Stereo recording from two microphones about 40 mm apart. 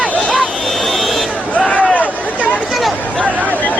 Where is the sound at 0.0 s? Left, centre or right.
Left.